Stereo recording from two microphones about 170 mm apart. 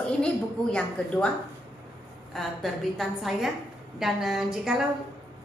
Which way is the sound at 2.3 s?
Centre (ahead or behind).